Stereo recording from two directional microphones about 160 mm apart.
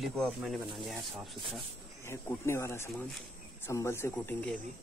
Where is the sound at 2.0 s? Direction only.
15° left (ahead or behind).